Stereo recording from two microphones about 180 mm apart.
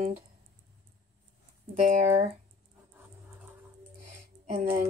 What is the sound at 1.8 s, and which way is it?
Speech, 40° right (ahead or behind).